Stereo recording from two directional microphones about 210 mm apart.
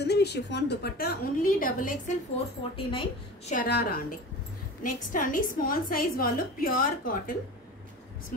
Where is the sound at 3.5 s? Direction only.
45° left (ahead or behind).